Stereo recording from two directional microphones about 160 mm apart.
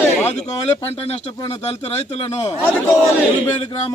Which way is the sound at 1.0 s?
40° left (ahead or behind).